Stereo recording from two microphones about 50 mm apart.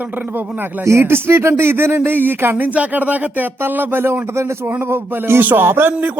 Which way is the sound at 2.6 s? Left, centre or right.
Right.